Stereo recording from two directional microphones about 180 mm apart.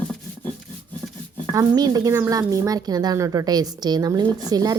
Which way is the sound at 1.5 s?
20° right (ahead or behind).